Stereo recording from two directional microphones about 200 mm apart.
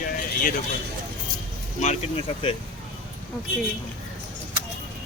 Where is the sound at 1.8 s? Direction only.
35° left (ahead or behind).